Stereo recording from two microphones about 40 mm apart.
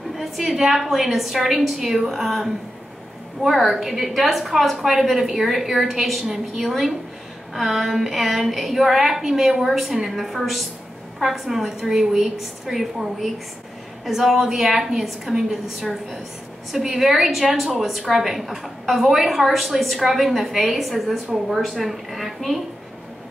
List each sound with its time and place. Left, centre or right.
0.2 s a woman's voice: centre
2.2 s a woman's voice: centre